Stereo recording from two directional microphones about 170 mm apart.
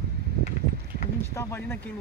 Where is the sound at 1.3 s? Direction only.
15° left (ahead or behind).